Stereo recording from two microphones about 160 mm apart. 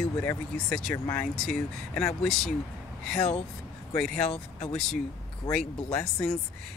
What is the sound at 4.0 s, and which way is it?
Speech, 5° left (ahead or behind).